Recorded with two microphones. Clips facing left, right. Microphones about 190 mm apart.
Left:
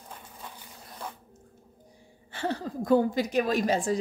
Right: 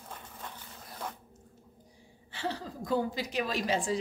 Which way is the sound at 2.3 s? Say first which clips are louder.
Left 5 dB; 50° left (ahead or behind).